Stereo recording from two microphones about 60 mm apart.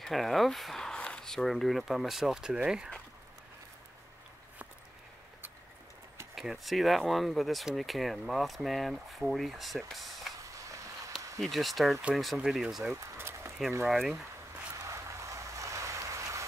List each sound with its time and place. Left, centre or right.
0.0 s speech: centre
6.3 s speech: centre
10.4 s vehicle: right
11.3 s speech: centre
12.9 s a sound: right
13.8 s speech: centre
14.9 s vehicle: right